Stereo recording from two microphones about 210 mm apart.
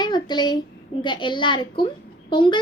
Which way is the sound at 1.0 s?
20° left (ahead or behind).